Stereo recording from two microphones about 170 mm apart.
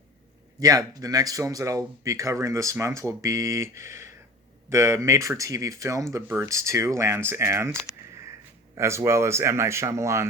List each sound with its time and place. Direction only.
0.6 s speech: 20° right (ahead or behind)
8.7 s speech: 15° right (ahead or behind)